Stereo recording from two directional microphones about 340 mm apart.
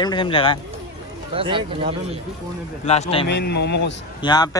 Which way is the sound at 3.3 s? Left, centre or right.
Left.